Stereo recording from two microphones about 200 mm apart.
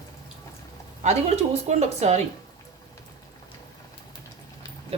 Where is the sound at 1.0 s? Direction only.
35° right (ahead or behind).